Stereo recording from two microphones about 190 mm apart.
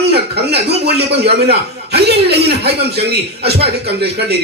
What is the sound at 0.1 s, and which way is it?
A man's voice, 60° right (ahead or behind).